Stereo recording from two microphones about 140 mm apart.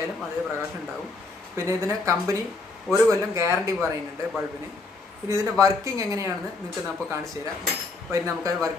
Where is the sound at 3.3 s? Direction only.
20° right (ahead or behind).